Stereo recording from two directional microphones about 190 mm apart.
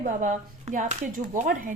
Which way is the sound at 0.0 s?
45° right (ahead or behind).